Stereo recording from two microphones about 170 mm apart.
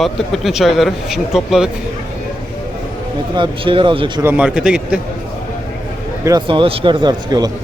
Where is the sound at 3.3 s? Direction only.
30° right (ahead or behind).